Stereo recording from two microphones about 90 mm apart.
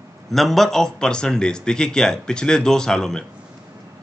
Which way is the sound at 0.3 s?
Centre (ahead or behind).